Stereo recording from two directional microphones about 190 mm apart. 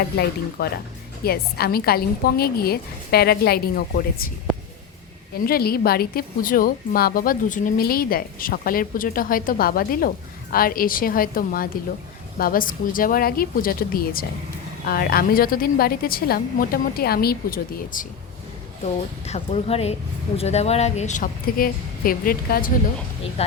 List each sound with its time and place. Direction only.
0.6 s a woman's voice: 55° left (ahead or behind)
5.5 s a woman's voice: 55° left (ahead or behind)
19.2 s speech: 35° left (ahead or behind); by 22.7 s 50° left (ahead or behind)
23.4 s speech: 35° left (ahead or behind)